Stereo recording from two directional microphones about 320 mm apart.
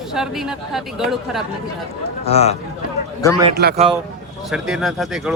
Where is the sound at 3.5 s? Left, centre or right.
Right.